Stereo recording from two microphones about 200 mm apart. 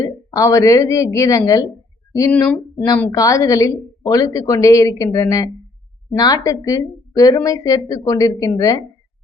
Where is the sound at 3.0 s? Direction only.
15° left (ahead or behind).